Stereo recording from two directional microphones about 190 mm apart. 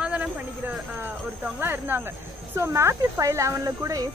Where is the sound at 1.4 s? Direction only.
10° right (ahead or behind).